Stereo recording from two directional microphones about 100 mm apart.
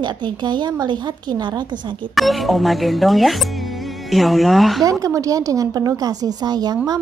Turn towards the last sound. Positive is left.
turn(degrees=-40)  # may be behind; listen again after turning